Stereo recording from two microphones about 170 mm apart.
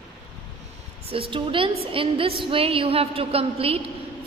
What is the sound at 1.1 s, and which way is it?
A woman's voice, 30° right (ahead or behind).